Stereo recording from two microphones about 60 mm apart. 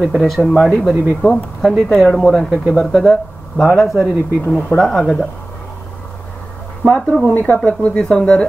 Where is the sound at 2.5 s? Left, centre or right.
Centre.